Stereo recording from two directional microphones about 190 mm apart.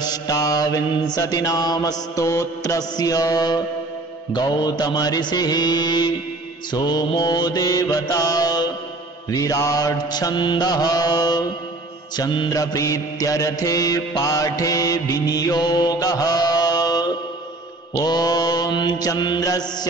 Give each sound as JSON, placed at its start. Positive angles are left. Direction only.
{"t": 0.0, "sound": "mantra", "side_deg": 20}